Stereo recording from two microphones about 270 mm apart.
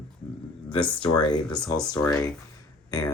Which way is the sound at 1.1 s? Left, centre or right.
Centre.